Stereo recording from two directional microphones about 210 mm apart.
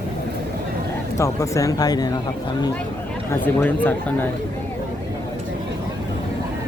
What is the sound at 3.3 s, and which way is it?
Speech, 10° left (ahead or behind).